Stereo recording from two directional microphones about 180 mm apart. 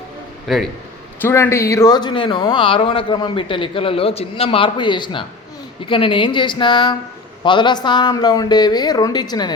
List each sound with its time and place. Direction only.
0.4 s a man's voice: centre (ahead or behind)
1.2 s speech: 15° left (ahead or behind)